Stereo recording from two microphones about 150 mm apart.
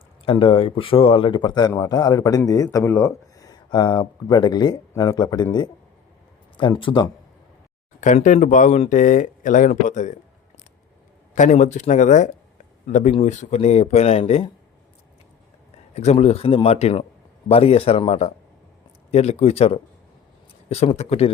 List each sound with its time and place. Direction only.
0.3 s speech: 35° left (ahead or behind)
8.0 s speech: 55° left (ahead or behind)
11.3 s speech: 55° left (ahead or behind)
16.0 s speech: 45° left (ahead or behind)